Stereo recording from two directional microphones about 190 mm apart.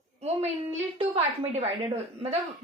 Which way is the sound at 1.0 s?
35° right (ahead or behind).